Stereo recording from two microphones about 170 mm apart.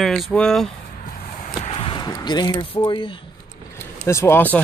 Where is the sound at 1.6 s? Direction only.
30° left (ahead or behind).